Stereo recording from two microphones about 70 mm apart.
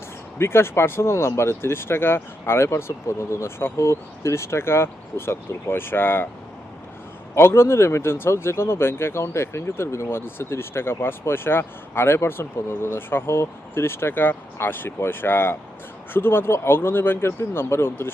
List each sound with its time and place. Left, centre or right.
0.3 s speech: left
7.3 s speech: left